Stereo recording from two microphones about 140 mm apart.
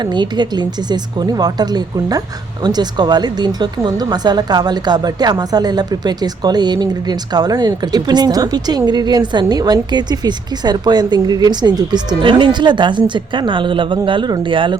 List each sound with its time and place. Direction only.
0.0 s speech: 30° right (ahead or behind)